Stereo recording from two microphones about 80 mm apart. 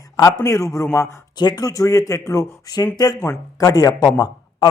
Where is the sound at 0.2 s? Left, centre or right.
Left.